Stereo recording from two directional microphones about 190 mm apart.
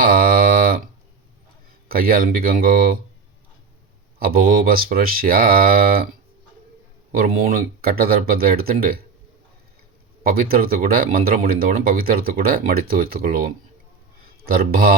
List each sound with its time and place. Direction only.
0.0 s a sound: 50° right (ahead or behind)
1.9 s speech: 50° right (ahead or behind)
4.2 s speech: 50° right (ahead or behind)
7.2 s speech: 50° right (ahead or behind)
10.2 s speech: 50° right (ahead or behind)